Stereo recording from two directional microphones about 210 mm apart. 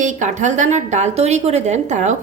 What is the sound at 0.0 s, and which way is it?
A woman's voice, 35° right (ahead or behind).